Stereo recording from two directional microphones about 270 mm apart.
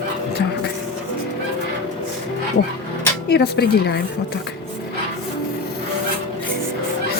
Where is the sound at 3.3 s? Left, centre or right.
Left.